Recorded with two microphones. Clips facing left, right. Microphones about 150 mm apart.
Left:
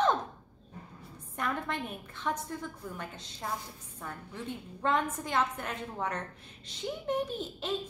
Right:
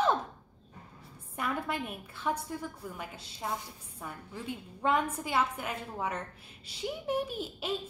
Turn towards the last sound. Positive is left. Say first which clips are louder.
# left 1 dB
turn(degrees=-10)  # may be behind; listen again after turning